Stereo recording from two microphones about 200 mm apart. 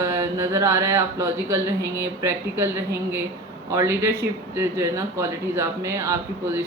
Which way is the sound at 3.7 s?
15° right (ahead or behind).